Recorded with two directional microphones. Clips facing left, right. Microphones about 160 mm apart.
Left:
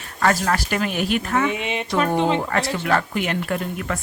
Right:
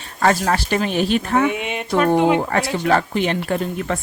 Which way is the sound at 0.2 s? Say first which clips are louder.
Right 2 dB; 25° right (ahead or behind).